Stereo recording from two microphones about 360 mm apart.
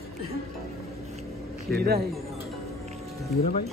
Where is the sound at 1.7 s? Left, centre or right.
Right.